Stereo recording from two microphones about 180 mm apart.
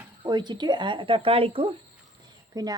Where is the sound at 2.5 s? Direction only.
20° right (ahead or behind).